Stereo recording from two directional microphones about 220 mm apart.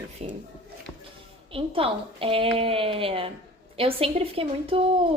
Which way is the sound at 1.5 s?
25° right (ahead or behind).